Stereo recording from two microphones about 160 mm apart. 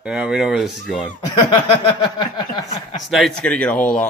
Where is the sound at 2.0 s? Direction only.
25° left (ahead or behind).